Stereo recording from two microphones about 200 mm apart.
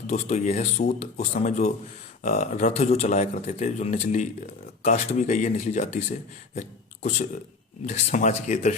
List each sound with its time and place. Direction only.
0.1 s a man's voice: 35° left (ahead or behind)